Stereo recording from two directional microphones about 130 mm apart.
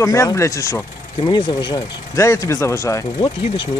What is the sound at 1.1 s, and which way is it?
Speech, 40° left (ahead or behind).